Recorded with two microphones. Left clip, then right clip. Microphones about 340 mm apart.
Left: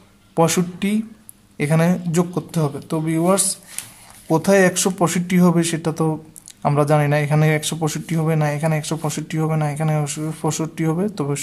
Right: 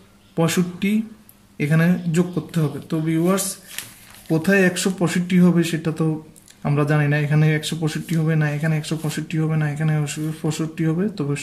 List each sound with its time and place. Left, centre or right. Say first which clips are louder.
0.4 s speech: left 4 dB; centre